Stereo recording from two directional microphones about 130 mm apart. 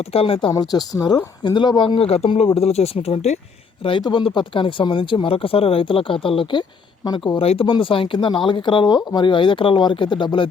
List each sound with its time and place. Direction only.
0.1 s speech: 45° left (ahead or behind)
0.5 s speech: 30° left (ahead or behind)
2.0 s speech: 50° left (ahead or behind)
4.0 s speech: 40° left (ahead or behind)
7.4 s speech: 45° left (ahead or behind)